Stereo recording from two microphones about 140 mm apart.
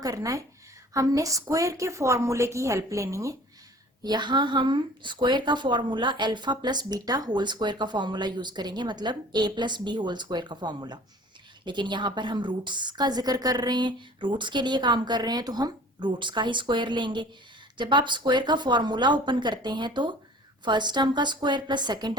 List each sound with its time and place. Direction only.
0.0 s a woman's voice: 25° right (ahead or behind)